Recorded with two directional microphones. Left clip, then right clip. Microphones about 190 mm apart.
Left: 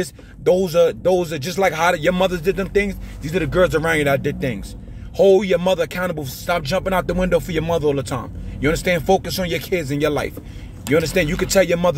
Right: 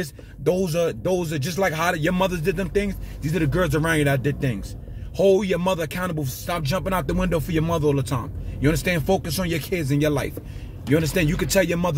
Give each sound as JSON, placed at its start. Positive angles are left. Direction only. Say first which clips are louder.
{"t": 0.0, "sound": "speech", "louder": "left 4 dB", "side_deg": -20}